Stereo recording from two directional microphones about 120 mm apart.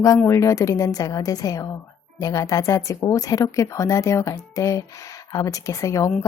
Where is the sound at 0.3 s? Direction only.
25° left (ahead or behind).